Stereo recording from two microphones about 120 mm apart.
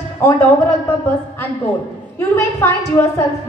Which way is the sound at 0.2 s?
20° left (ahead or behind).